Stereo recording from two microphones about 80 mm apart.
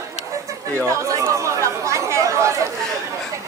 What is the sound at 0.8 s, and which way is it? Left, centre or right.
Chatter, right.